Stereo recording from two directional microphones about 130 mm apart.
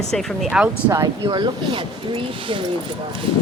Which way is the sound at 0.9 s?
25° right (ahead or behind).